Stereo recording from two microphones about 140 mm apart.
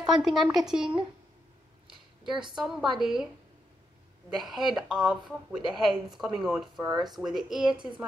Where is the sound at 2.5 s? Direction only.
5° right (ahead or behind).